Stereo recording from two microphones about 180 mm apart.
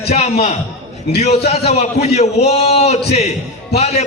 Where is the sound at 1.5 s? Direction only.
35° left (ahead or behind).